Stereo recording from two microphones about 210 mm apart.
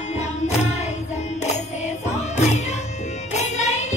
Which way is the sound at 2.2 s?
30° left (ahead or behind).